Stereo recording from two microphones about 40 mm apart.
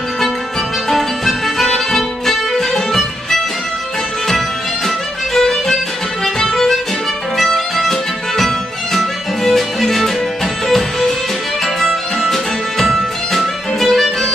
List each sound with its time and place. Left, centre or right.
0.8 s music: centre
4.8 s music: centre